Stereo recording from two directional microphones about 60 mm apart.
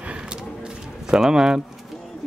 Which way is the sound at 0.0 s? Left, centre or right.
Centre.